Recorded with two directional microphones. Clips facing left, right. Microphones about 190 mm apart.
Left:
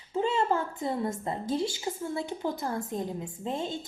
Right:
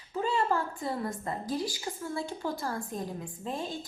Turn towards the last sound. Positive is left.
turn(degrees=25)  # may be behind; listen again after turning